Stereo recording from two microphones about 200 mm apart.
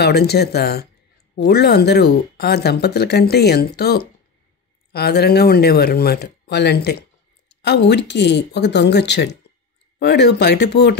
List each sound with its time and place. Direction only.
0.0 s speech: 55° left (ahead or behind)